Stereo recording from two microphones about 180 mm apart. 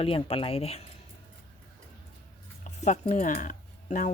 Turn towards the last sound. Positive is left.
turn(degrees=45)  # may be behind; listen again after turning